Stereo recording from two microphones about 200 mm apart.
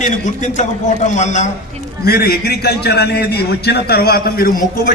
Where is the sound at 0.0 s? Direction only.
40° left (ahead or behind).